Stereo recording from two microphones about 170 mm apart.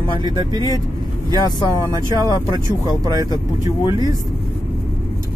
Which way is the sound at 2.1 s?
20° right (ahead or behind).